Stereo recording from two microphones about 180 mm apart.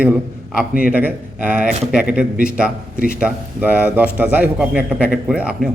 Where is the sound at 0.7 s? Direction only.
50° left (ahead or behind).